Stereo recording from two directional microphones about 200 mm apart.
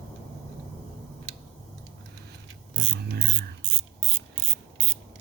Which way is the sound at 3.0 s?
50° right (ahead or behind).